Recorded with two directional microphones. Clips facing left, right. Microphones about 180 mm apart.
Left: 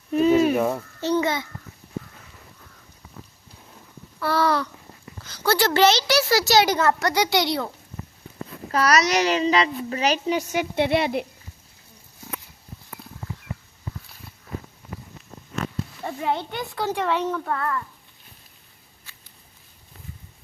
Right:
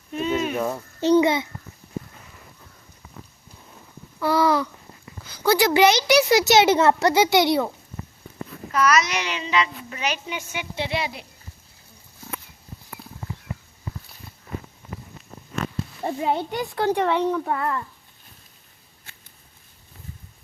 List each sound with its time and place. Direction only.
0.1 s a sound: 40° left (ahead or behind)
1.0 s a woman's voice: 15° right (ahead or behind)
4.2 s a woman's voice: 15° right (ahead or behind)
8.7 s a child's voice: 35° left (ahead or behind)
10.8 s speech: 55° left (ahead or behind)
16.0 s a woman's voice: 20° right (ahead or behind)